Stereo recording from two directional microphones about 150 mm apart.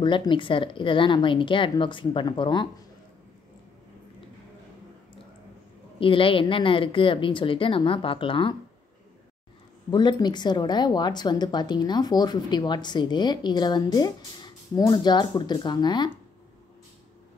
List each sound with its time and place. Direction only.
0.0 s speech: 30° left (ahead or behind)
5.9 s speech: 35° left (ahead or behind)
9.8 s speech: 30° left (ahead or behind)